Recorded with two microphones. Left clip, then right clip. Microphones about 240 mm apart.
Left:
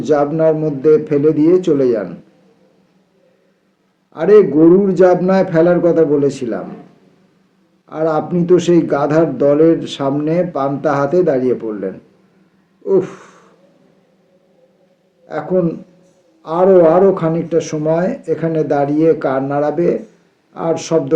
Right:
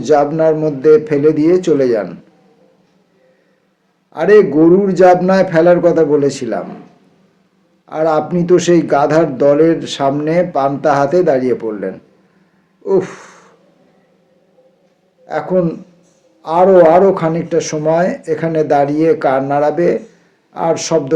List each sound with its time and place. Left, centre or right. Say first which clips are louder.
0.0 s speech: right 2 dB; right
4.1 s a man's voice: right 1 dB; right
7.9 s speech: right 3 dB; right
12.8 s a sound: even; right
15.3 s a man's voice: right 2 dB; right
16.6 s a man's voice: right 1 dB; right
16.9 s speech: right 2 dB; right